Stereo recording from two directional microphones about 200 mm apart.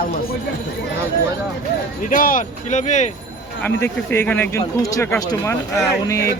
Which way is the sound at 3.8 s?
10° left (ahead or behind).